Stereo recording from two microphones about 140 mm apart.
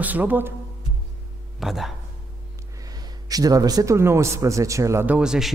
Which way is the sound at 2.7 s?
25° right (ahead or behind).